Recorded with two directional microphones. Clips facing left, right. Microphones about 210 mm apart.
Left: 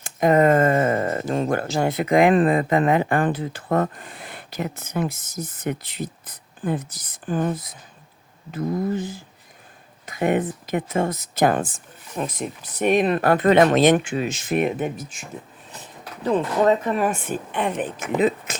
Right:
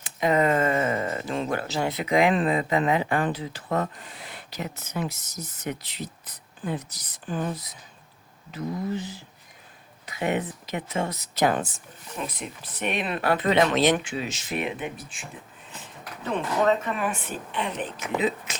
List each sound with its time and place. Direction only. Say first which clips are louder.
0.0 s speech: left 6 dB; 50° left (ahead or behind)